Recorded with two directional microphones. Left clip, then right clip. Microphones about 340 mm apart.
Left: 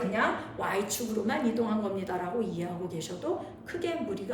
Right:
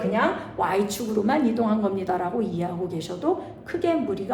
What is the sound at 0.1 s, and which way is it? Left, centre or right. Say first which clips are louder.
A woman's voice: right 6 dB; centre.